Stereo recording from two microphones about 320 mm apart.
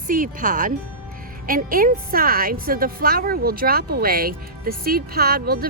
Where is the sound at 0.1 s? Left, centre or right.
Right.